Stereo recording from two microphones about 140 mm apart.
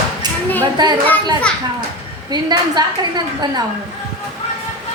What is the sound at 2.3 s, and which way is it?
A woman's voice, 30° right (ahead or behind).